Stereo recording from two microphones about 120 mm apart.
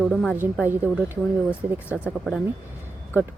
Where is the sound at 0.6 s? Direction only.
15° right (ahead or behind).